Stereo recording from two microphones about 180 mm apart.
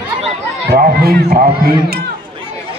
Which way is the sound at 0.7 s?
60° right (ahead or behind).